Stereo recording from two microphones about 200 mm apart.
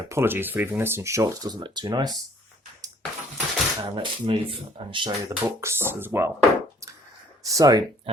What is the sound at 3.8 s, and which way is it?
Speech, 20° right (ahead or behind).